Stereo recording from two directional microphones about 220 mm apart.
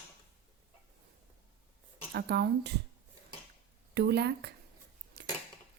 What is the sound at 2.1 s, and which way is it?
Speech, 45° right (ahead or behind).